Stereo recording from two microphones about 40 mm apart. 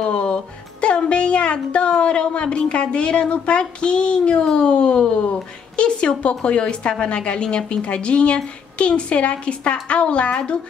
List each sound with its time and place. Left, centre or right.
0.0 s a woman's voice: left